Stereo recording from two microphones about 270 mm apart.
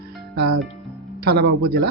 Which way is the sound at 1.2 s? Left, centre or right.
Right.